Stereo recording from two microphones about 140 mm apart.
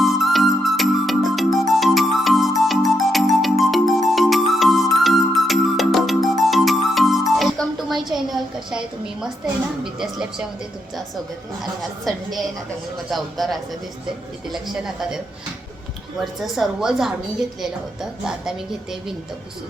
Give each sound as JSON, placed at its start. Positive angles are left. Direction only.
{"t": 0.0, "sound": "music", "side_deg": 0}
{"t": 9.8, "sound": "music", "side_deg": -5}
{"t": 11.8, "sound": "a woman's voice", "side_deg": 0}
{"t": 16.4, "sound": "a woman's voice", "side_deg": 0}